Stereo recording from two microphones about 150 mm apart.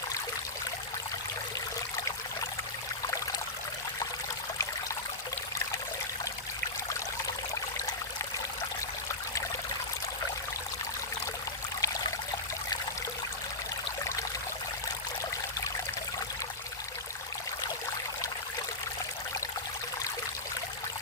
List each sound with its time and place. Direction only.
11.8 s stream: 25° left (ahead or behind)